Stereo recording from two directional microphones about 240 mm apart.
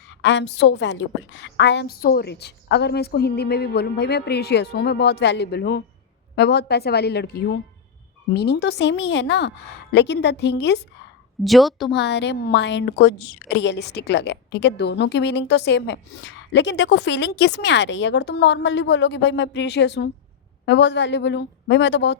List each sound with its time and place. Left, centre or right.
0.2 s a woman's voice: left
11.4 s a woman's voice: centre
11.9 s a woman's voice: left